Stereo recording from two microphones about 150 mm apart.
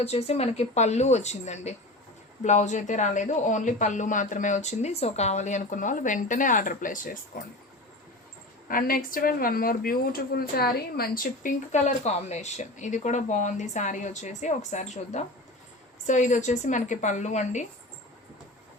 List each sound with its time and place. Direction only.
0.0 s speech: 45° left (ahead or behind); by 7.2 s 65° left (ahead or behind)
8.6 s speech: 70° left (ahead or behind)
11.7 s speech: 50° left (ahead or behind)